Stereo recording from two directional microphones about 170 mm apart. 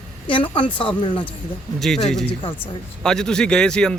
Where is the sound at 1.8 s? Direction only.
Centre (ahead or behind).